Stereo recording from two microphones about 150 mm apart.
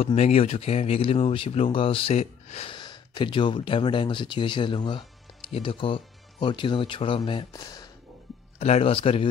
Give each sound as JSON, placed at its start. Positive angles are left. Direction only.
{"t": 0.0, "sound": "speech", "side_deg": 45}
{"t": 2.7, "sound": "speech", "side_deg": 30}
{"t": 8.5, "sound": "speech", "side_deg": 40}